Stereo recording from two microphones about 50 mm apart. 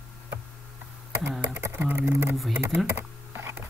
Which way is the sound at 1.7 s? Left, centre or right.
Right.